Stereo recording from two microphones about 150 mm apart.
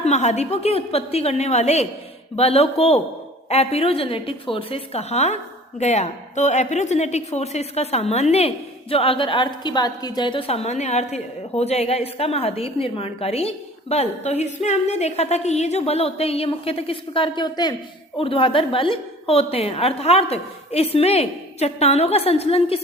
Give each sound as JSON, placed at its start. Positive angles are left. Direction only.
{"t": 0.0, "sound": "a woman's voice", "side_deg": 50}